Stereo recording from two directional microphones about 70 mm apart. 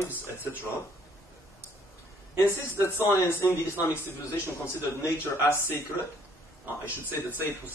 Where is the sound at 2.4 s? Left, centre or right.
Left.